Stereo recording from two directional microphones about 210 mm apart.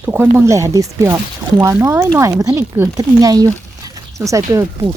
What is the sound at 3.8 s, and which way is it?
Zipper, 15° right (ahead or behind).